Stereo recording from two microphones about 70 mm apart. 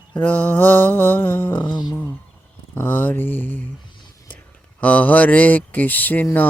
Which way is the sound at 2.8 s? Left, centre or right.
Left.